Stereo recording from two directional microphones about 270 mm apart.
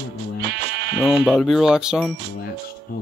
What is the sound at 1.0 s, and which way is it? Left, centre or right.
Speech, centre.